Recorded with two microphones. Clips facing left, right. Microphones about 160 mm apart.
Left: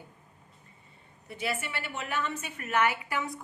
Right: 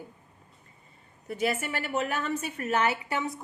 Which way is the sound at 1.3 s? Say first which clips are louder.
Right 5 dB; 40° right (ahead or behind).